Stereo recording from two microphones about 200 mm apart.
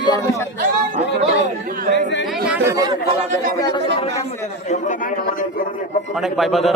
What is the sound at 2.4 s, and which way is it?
Speech, 10° right (ahead or behind).